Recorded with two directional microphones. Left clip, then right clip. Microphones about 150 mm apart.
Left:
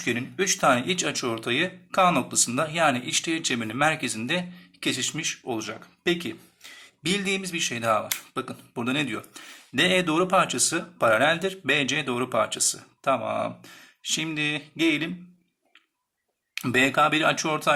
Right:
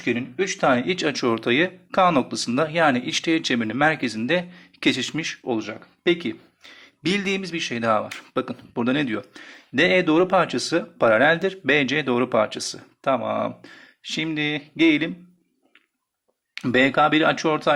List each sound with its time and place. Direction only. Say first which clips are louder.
0.0 s speech: right 2 dB; 15° right (ahead or behind)
16.6 s speech: right 3 dB; 25° right (ahead or behind)